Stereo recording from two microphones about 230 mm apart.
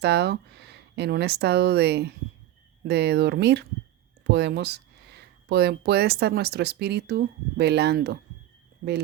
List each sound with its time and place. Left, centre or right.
0.0 s speech: right